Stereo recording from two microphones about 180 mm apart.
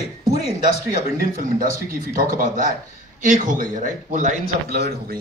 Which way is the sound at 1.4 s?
50° right (ahead or behind).